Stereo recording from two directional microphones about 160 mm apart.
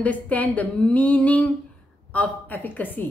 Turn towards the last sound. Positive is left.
turn(degrees=10)  # may be behind; listen again after turning